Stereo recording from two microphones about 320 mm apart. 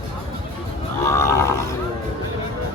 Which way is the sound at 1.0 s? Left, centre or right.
Centre.